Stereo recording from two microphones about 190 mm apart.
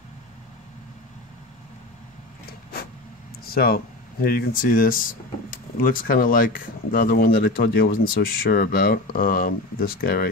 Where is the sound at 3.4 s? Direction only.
55° left (ahead or behind).